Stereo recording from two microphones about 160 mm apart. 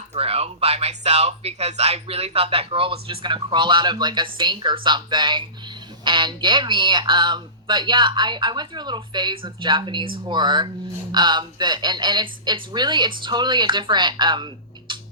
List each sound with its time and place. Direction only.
0.1 s speech: 40° right (ahead or behind)